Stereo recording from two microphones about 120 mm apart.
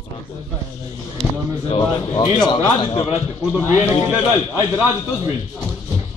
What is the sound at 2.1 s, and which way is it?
Speech, 40° left (ahead or behind).